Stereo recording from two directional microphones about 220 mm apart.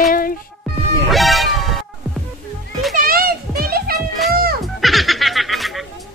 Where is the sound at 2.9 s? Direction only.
40° right (ahead or behind).